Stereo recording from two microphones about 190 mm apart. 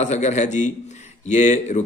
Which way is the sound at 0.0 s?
35° left (ahead or behind).